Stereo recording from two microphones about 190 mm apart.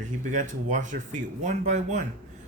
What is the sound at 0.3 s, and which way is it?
Speech, 40° right (ahead or behind).